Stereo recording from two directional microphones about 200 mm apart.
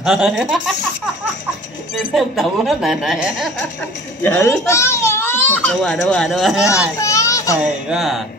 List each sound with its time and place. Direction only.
0.0 s speech: 5° right (ahead or behind)
2.1 s speech: centre (ahead or behind)
4.2 s speech: 10° left (ahead or behind)
7.0 s a sound: 15° left (ahead or behind)
7.9 s speech: centre (ahead or behind)